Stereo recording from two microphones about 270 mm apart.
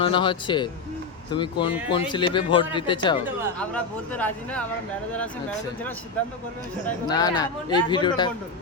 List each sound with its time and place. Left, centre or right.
0.0 s speech: centre
3.6 s speech: centre
7.1 s speech: centre